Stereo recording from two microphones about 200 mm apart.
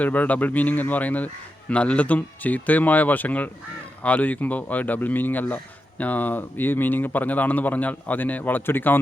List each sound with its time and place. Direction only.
0.0 s speech: 10° left (ahead or behind)